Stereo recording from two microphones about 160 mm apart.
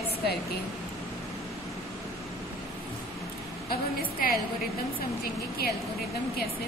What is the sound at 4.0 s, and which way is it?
Speech, 65° left (ahead or behind).